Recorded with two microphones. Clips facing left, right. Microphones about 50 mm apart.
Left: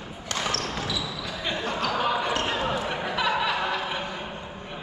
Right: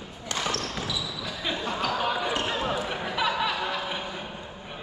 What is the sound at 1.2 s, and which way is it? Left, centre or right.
Basketball bounce, centre.